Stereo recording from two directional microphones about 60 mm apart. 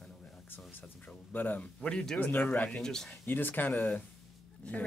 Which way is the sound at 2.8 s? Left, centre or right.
Centre.